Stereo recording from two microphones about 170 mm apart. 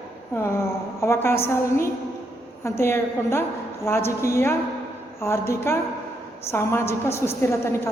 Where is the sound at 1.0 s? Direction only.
15° left (ahead or behind).